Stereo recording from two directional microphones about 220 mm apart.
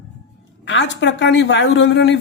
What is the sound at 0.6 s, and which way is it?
Speech, 55° left (ahead or behind).